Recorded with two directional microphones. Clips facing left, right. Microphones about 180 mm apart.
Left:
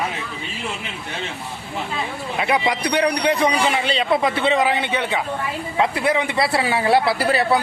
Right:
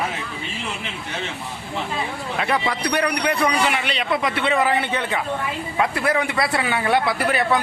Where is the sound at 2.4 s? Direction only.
15° left (ahead or behind).